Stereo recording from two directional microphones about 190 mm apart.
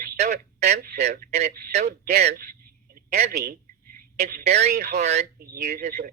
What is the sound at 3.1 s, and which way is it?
Speech, 55° right (ahead or behind).